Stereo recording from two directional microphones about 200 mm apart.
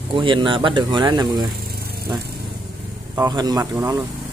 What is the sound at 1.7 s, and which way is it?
Vehicle, 50° right (ahead or behind).